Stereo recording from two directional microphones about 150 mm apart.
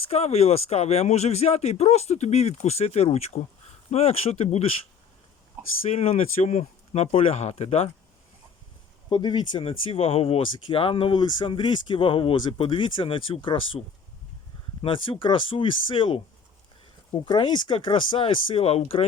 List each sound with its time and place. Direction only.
0.1 s speech: 45° left (ahead or behind)
5.6 s a sound: 10° right (ahead or behind)
5.9 s speech: 40° left (ahead or behind)
9.0 s speech: 30° left (ahead or behind)